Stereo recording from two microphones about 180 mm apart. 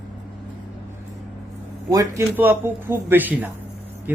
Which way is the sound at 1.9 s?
15° right (ahead or behind).